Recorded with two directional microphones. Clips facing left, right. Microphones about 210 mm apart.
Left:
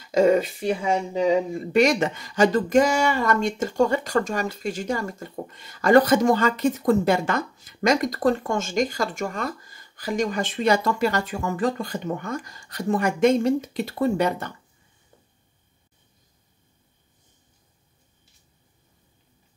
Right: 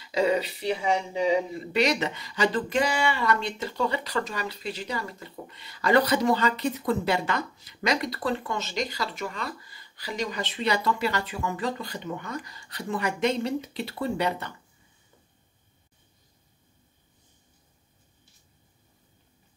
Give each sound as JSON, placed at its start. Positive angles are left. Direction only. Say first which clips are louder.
{"t": 0.0, "sound": "speech", "louder": "left 6 dB", "side_deg": 45}